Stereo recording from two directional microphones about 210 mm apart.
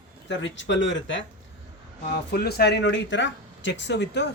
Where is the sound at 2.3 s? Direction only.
50° left (ahead or behind).